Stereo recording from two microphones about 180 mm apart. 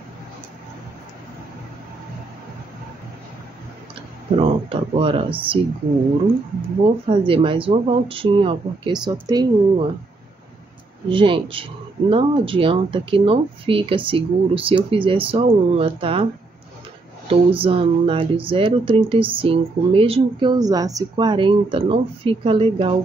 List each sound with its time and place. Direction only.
4.4 s speech: 30° right (ahead or behind)
7.1 s speech: 30° right (ahead or behind)
11.1 s speech: 30° right (ahead or behind)
17.3 s speech: 30° right (ahead or behind)